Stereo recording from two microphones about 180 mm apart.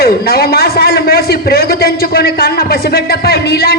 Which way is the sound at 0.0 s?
60° left (ahead or behind).